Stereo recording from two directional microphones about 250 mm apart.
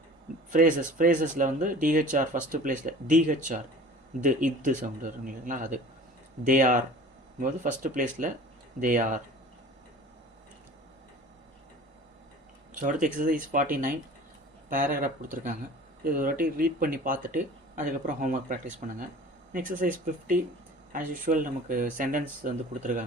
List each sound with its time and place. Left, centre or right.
0.5 s speech: right
12.7 s speech: right